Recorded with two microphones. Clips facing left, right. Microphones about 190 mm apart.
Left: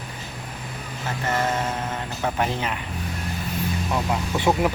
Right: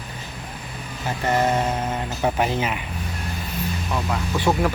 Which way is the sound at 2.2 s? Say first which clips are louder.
Right 3 dB; 10° right (ahead or behind).